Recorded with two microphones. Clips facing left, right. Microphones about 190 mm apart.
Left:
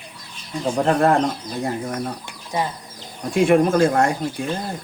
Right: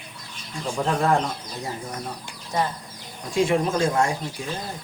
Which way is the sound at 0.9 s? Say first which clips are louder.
Left 5 dB; 60° left (ahead or behind).